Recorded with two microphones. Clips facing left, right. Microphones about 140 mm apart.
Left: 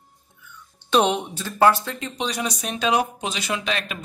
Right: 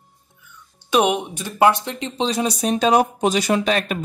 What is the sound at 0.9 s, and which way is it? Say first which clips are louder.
Speech: right 2 dB; 10° right (ahead or behind).